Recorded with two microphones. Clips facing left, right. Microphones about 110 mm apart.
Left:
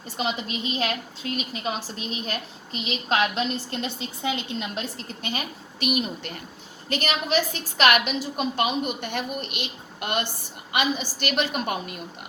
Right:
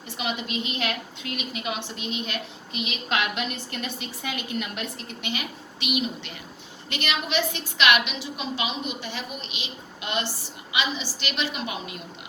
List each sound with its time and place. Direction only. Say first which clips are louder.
0.2 s a woman's voice: left 2 dB; 35° left (ahead or behind); by 11.9 s 50° left (ahead or behind)